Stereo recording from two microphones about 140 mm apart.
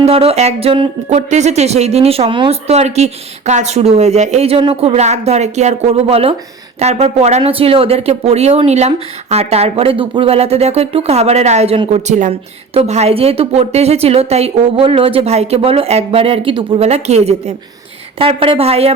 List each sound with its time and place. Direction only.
0.0 s speech: 45° right (ahead or behind)
1.3 s a woman's voice: 55° right (ahead or behind)
12.3 s speech: 45° right (ahead or behind)